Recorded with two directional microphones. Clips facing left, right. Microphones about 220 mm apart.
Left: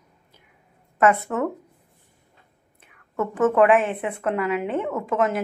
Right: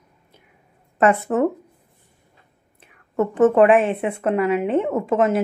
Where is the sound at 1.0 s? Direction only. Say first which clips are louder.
Right 3 dB; 30° right (ahead or behind).